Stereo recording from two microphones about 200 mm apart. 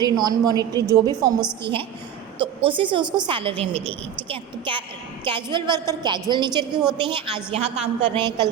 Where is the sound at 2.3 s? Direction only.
25° right (ahead or behind).